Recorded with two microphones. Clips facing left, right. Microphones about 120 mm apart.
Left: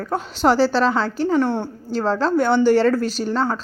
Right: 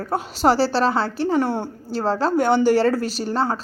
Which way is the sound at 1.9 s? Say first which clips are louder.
Left 1 dB; 40° right (ahead or behind).